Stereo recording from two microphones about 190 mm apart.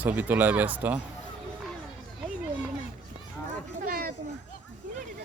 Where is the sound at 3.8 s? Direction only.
50° right (ahead or behind).